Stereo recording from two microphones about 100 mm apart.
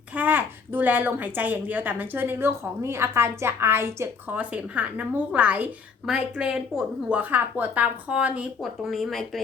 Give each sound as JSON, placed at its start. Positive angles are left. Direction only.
{"t": 0.1, "sound": "speech", "side_deg": -15}
{"t": 4.3, "sound": "a woman's voice", "side_deg": -15}
{"t": 7.2, "sound": "a woman's voice", "side_deg": -20}
{"t": 8.6, "sound": "speech", "side_deg": 0}